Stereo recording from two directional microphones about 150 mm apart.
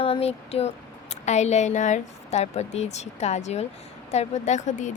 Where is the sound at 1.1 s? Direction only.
50° left (ahead or behind).